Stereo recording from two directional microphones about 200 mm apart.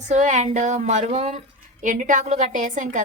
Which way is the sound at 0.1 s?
35° right (ahead or behind).